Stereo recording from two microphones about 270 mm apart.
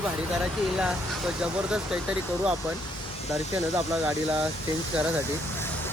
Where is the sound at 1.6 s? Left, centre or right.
Centre.